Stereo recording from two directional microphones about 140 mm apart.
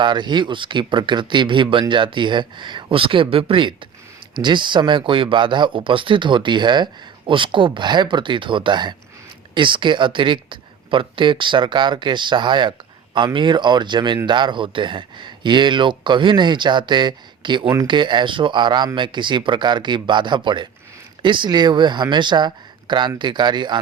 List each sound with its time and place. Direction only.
0.0 s speech: 35° right (ahead or behind)